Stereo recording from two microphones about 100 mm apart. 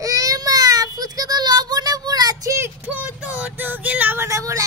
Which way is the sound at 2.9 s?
15° right (ahead or behind).